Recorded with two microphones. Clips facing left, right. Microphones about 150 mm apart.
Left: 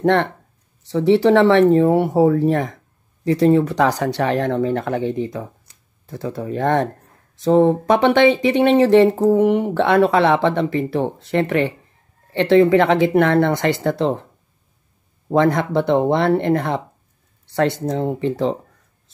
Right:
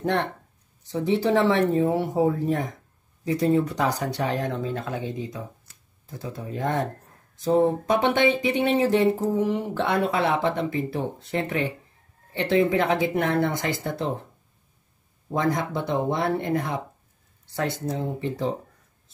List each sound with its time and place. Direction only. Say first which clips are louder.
0.0 s speech: left 8 dB; 70° left (ahead or behind)
15.3 s speech: left 9 dB; 75° left (ahead or behind)
17.6 s speech: left 8 dB; 85° left